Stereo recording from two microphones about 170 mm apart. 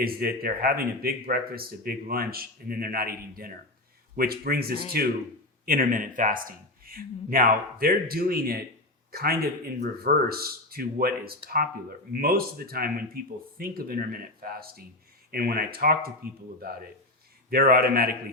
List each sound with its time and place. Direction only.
0.0 s speech: 60° right (ahead or behind)